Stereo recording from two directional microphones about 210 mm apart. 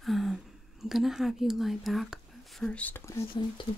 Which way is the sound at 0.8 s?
Centre (ahead or behind).